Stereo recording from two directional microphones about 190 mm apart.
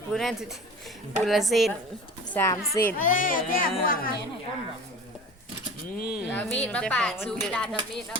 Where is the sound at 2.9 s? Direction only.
45° left (ahead or behind).